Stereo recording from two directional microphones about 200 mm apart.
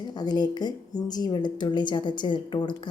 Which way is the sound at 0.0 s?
20° left (ahead or behind).